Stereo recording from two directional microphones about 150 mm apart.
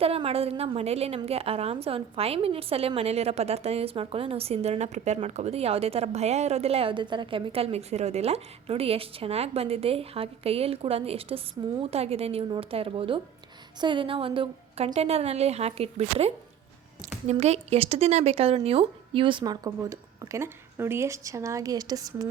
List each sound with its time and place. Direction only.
0.0 s a woman's voice: 40° right (ahead or behind); by 22.3 s 25° right (ahead or behind)